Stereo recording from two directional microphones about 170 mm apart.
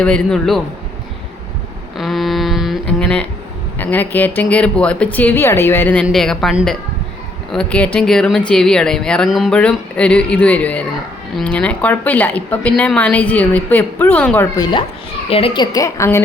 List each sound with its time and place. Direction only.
0.0 s speech: 5° left (ahead or behind)
2.0 s a sound: centre (ahead or behind)
3.8 s a woman's voice: 10° left (ahead or behind)
14.5 s a woman's voice: 25° left (ahead or behind)